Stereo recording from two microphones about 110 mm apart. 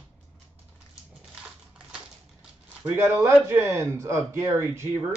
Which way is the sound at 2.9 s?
20° right (ahead or behind).